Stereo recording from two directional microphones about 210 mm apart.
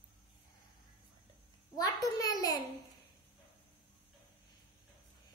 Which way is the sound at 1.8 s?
15° left (ahead or behind).